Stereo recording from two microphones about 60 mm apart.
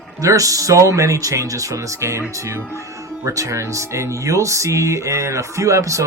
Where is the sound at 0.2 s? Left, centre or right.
Right.